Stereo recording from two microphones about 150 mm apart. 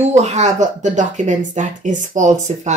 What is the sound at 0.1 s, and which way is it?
Speech, 50° right (ahead or behind).